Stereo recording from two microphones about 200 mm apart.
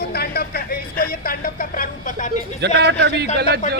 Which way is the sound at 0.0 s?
50° left (ahead or behind).